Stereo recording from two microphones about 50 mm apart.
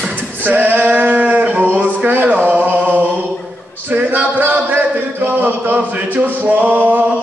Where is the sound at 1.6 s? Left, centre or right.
Right.